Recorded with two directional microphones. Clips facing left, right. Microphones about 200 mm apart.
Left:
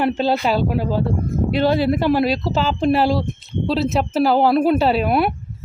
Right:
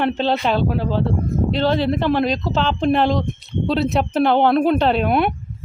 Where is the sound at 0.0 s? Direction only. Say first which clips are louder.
Left 1 dB; 10° left (ahead or behind).